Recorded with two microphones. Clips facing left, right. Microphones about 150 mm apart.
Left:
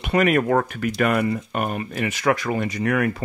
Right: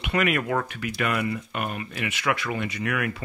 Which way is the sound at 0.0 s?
40° left (ahead or behind).